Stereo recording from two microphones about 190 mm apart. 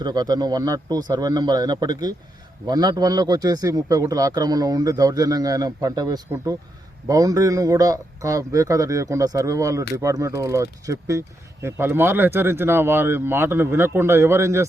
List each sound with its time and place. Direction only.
0.0 s a man's voice: 20° right (ahead or behind)